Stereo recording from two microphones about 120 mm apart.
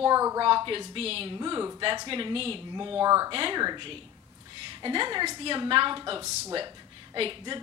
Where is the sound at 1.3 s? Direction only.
35° right (ahead or behind).